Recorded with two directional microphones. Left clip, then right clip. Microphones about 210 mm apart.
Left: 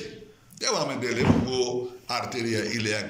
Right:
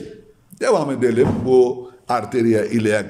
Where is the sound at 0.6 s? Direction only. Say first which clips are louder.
Right 10 dB; 60° right (ahead or behind).